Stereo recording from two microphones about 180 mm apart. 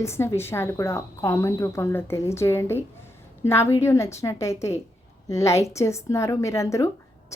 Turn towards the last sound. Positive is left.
turn(degrees=15)  # may be behind; listen again after turning